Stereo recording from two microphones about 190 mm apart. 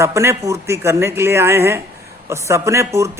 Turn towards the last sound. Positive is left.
turn(degrees=-15)  # may be behind; listen again after turning